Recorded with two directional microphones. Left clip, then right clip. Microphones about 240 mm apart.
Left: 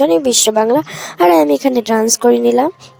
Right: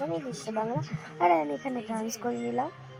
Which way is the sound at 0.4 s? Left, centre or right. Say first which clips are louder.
Left 19 dB; left.